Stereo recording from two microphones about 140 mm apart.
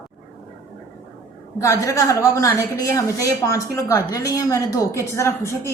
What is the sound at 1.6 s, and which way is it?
A woman's voice, 25° left (ahead or behind).